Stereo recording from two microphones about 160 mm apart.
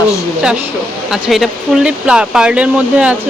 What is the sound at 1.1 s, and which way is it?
Speech, centre (ahead or behind).